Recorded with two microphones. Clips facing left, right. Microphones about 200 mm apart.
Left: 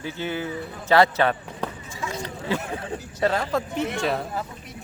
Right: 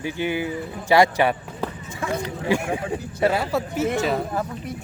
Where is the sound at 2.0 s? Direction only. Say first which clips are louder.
Right 6 dB; 55° right (ahead or behind).